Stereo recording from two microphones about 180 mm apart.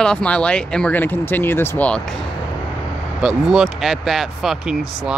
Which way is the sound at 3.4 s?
Centre (ahead or behind).